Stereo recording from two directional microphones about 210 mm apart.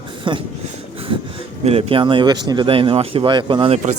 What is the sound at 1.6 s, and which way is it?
Speech, 30° right (ahead or behind).